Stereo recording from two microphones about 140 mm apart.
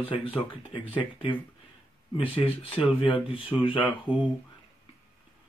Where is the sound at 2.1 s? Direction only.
40° left (ahead or behind).